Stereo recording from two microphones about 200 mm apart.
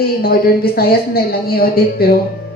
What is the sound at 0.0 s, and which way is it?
A woman's voice, 50° left (ahead or behind).